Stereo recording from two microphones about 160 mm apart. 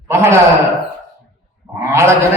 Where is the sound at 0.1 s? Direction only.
15° right (ahead or behind).